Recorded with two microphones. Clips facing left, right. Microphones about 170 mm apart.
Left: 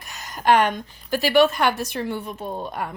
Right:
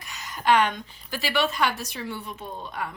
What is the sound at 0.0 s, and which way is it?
A woman's voice, 45° left (ahead or behind).